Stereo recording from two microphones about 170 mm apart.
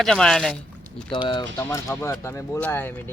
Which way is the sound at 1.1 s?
25° left (ahead or behind).